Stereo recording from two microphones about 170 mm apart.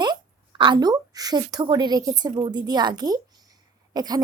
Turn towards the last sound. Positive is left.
turn(degrees=-25)  # may be behind; listen again after turning